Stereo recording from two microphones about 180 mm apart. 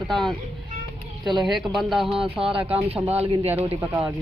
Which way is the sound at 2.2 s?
30° right (ahead or behind).